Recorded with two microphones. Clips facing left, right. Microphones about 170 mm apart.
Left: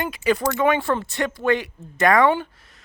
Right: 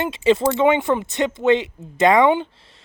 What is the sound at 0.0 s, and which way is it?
Speech, 25° right (ahead or behind).